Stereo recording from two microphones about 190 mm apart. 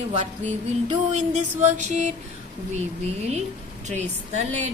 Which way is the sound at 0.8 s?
40° right (ahead or behind).